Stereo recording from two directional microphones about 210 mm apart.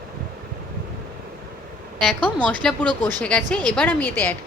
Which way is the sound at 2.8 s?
20° right (ahead or behind).